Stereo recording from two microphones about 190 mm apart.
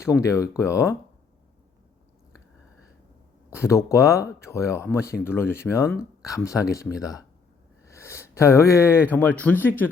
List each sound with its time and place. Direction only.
0.2 s speech: 15° left (ahead or behind)
3.5 s speech: 15° left (ahead or behind)